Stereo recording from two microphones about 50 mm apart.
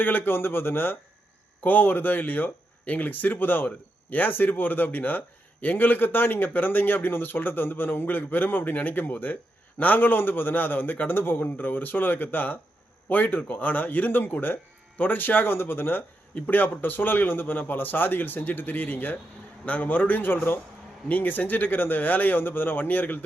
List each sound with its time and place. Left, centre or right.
0.0 s a man's voice: left